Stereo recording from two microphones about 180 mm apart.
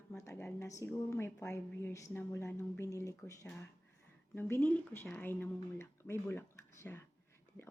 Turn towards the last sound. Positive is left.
turn(degrees=10)  # may be behind; listen again after turning